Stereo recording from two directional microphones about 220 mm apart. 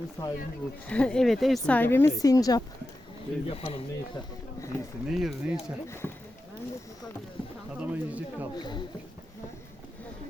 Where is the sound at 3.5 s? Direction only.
25° left (ahead or behind).